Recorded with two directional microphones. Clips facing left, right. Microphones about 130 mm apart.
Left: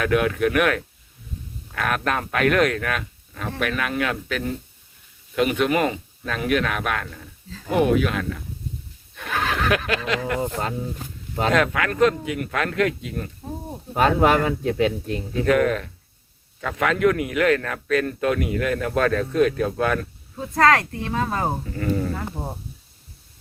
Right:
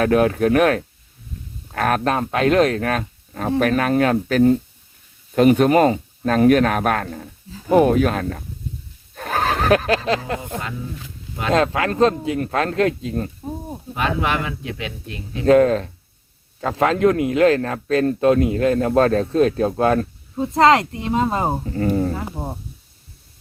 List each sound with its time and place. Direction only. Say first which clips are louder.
0.0 s speech: right 4 dB; 35° right (ahead or behind)
2.1 s speech: right 2 dB; 25° right (ahead or behind); by 8.4 s 40° right (ahead or behind)
9.1 s snicker: right 4 dB; 40° right (ahead or behind)
11.5 s speech: right 5 dB; 30° right (ahead or behind)
13.9 s speech: left 4 dB; 40° left (ahead or behind)
15.4 s speech: right 6 dB; 30° right (ahead or behind)
21.6 s speech: right 5 dB; 35° right (ahead or behind)
22.1 s speech: right 2 dB; 15° right (ahead or behind)